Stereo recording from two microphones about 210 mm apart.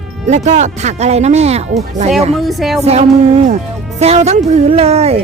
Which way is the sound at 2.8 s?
30° right (ahead or behind).